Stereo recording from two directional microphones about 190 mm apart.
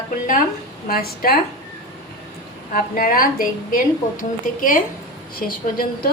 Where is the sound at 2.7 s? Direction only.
45° left (ahead or behind).